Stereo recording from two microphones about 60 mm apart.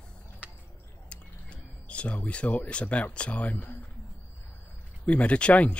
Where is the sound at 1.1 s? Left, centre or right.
Left.